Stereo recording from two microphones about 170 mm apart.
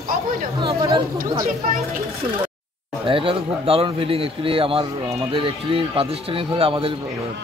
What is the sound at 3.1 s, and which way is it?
A man's voice, 30° right (ahead or behind).